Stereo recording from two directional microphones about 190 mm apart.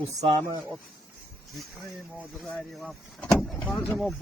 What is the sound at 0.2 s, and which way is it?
Speech, 35° right (ahead or behind).